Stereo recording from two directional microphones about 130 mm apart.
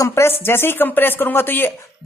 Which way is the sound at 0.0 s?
20° left (ahead or behind).